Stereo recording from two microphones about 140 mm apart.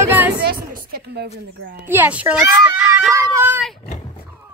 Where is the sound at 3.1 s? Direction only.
20° right (ahead or behind).